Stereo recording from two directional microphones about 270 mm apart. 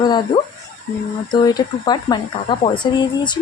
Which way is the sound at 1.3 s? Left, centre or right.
Centre.